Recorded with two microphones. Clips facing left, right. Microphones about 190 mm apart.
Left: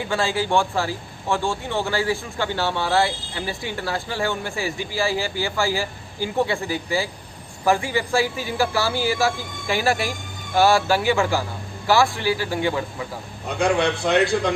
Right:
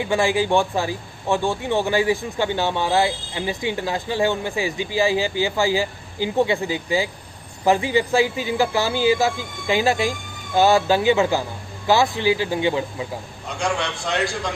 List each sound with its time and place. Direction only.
0.0 s a man's voice: 15° right (ahead or behind)
13.6 s a man's voice: 60° left (ahead or behind)